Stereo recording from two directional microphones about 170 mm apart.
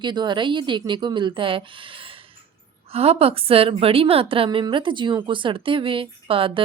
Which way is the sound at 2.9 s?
35° right (ahead or behind).